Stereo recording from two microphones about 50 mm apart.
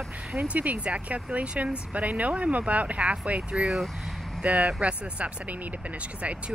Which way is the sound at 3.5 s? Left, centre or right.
Centre.